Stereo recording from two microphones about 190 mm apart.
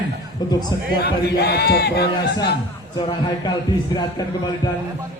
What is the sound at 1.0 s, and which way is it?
Speech, 60° left (ahead or behind).